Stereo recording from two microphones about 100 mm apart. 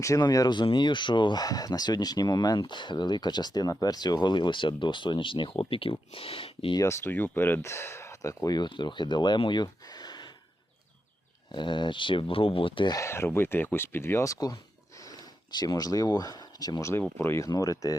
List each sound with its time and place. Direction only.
0.0 s speech: 35° left (ahead or behind); by 6.7 s 65° left (ahead or behind)
6.7 s speech: 30° left (ahead or behind)
8.5 s speech: 50° left (ahead or behind)
11.5 s speech: 50° left (ahead or behind)
12.9 s speech: 30° left (ahead or behind)
17.2 s speech: 25° left (ahead or behind)